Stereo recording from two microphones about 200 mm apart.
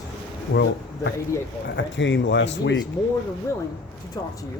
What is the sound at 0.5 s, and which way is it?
Speech, 60° left (ahead or behind).